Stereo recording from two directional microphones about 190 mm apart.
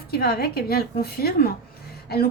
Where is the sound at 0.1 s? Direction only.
55° left (ahead or behind).